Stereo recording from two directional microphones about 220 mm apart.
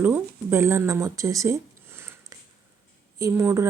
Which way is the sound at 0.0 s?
10° right (ahead or behind).